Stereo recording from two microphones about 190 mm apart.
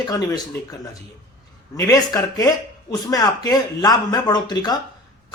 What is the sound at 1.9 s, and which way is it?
Speech, 20° left (ahead or behind).